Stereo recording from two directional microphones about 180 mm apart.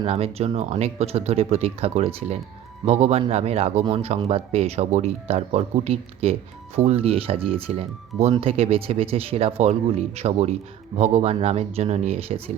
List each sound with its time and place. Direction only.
0.0 s speech: 35° right (ahead or behind)